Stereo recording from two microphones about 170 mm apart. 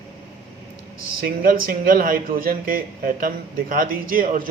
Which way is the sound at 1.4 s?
55° right (ahead or behind).